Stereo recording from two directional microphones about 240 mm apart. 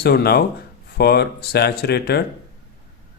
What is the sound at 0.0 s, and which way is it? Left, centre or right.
Mantra, left.